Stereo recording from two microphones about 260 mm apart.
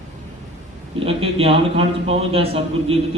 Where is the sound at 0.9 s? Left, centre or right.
Right.